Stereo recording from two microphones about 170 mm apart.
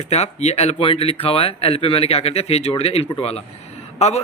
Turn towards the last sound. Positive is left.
turn(degrees=40)  # may be behind; listen again after turning